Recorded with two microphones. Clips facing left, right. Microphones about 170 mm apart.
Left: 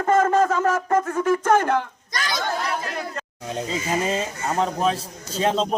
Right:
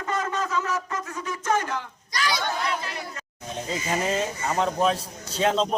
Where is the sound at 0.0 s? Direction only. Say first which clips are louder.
Left 10 dB; 50° left (ahead or behind).